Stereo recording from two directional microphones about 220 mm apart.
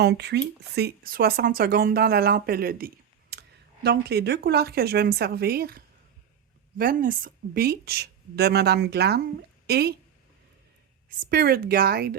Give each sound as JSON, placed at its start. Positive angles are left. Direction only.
{"t": 0.0, "sound": "speech", "side_deg": -50}
{"t": 11.2, "sound": "speech", "side_deg": -40}